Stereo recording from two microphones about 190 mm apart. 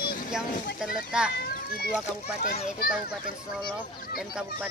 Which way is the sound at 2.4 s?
50° left (ahead or behind).